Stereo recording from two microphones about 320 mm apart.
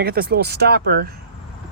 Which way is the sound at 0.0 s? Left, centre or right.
Right.